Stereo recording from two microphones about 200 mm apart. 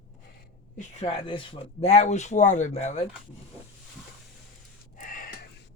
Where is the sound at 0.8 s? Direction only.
30° left (ahead or behind).